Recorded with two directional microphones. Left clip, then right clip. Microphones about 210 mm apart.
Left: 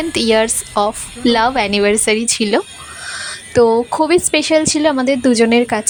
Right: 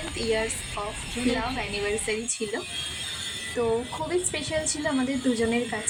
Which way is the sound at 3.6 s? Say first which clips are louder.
Left 16 dB; 40° left (ahead or behind).